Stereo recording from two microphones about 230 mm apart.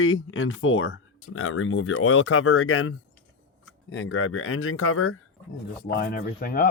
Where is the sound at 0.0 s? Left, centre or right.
Left.